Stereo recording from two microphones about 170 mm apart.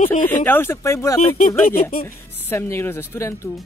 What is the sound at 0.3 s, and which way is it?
Speech, 10° left (ahead or behind).